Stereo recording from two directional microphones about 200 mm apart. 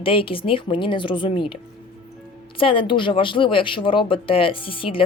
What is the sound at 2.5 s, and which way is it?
Speech, 25° left (ahead or behind).